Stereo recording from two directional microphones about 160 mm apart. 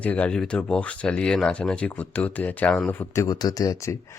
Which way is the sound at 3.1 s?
20° left (ahead or behind).